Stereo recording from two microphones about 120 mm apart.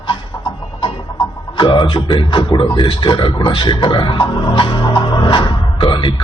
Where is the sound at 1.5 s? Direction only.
40° left (ahead or behind).